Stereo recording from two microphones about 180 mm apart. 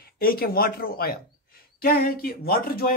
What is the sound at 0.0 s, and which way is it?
Speech, 55° left (ahead or behind).